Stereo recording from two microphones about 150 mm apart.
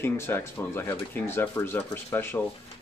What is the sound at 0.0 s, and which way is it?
Speech, 15° left (ahead or behind).